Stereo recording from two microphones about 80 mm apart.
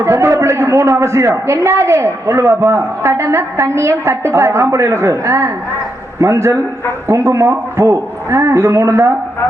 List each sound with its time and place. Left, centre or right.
0.0 s a man's voice: right